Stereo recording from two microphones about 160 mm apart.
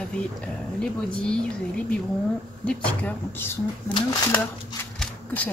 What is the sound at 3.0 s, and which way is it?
Speech, 15° left (ahead or behind).